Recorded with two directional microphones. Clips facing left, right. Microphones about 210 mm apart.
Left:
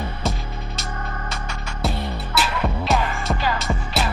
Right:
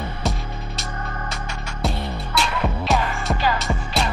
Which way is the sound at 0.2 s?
Centre (ahead or behind).